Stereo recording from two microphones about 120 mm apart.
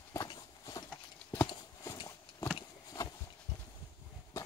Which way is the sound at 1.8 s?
30° left (ahead or behind).